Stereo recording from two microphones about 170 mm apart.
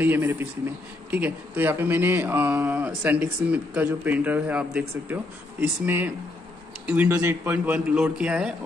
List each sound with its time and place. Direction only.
0.0 s speech: 10° right (ahead or behind)